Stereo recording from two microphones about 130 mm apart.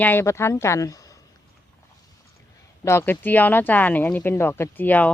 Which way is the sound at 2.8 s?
20° left (ahead or behind).